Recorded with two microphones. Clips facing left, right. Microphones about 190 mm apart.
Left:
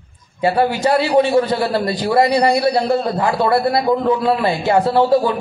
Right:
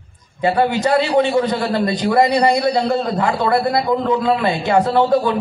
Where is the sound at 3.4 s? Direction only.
20° right (ahead or behind).